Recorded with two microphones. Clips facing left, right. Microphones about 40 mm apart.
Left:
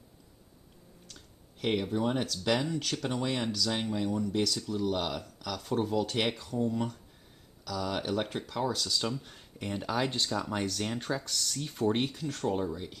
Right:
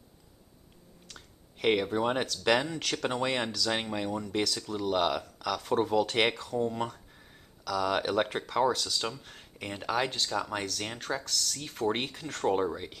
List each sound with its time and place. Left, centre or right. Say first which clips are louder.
1.0 s speech: right 5 dB; right
6.6 s speech: left 1 dB; right
7.6 s speech: right 5 dB; right
8.8 s speech: left 1 dB; centre
10.0 s speech: left 1 dB; centre
10.3 s speech: right 1 dB; centre
11.2 s speech: right 2 dB; centre
11.5 s speech: left 2 dB; centre
12.1 s speech: right 3 dB; right